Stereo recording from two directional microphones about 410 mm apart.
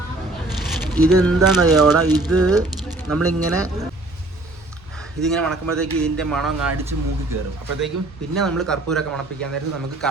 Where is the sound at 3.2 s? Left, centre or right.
Right.